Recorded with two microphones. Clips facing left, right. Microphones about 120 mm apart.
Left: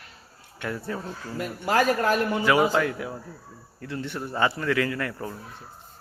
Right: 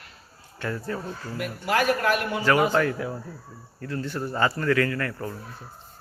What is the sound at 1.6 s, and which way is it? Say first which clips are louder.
Speech: left 1 dB; 35° left (ahead or behind).